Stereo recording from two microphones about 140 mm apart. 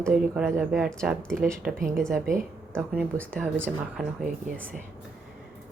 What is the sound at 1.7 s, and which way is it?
Speech, 90° right.